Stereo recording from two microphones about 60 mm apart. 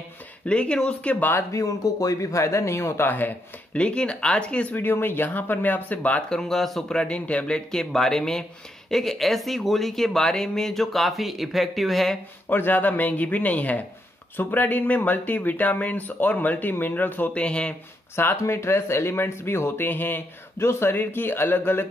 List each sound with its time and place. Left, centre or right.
0.5 s speech: centre
1.5 s speech: left
3.1 s speech: left
3.7 s speech: centre
4.7 s speech: left
6.2 s speech: centre
12.4 s speech: left
17.4 s speech: centre
18.1 s speech: left
19.9 s speech: left